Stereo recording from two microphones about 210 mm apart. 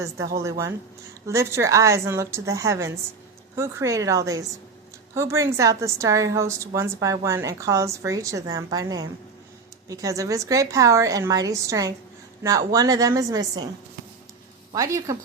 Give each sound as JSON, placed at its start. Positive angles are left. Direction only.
{"t": 0.4, "sound": "a woman's voice", "side_deg": -15}
{"t": 14.7, "sound": "speech", "side_deg": -15}